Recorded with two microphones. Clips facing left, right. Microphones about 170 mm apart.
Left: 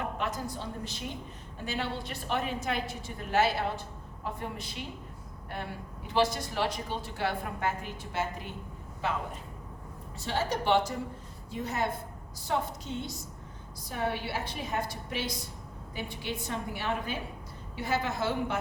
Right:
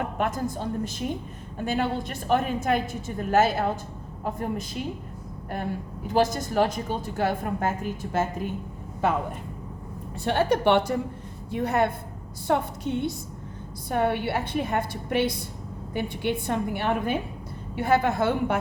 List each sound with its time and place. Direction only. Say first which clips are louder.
0.2 s a woman's voice: right 7 dB; 50° right (ahead or behind)
6.1 s a woman's voice: right 6 dB; 45° right (ahead or behind)
10.2 s a woman's voice: right 7 dB; 60° right (ahead or behind)